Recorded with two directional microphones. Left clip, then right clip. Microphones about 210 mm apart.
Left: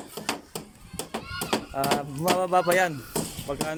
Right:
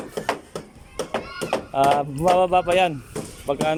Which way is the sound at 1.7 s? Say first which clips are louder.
Right 11 dB; 5° right (ahead or behind).